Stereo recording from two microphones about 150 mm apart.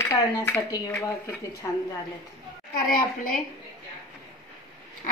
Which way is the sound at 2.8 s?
65° left (ahead or behind).